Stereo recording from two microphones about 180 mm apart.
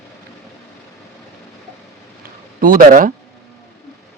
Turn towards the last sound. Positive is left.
turn(degrees=-50)  # may be behind; listen again after turning